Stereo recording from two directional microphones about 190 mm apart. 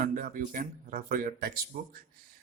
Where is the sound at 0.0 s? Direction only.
45° right (ahead or behind).